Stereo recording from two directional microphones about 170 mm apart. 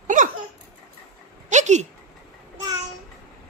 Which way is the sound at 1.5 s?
45° right (ahead or behind).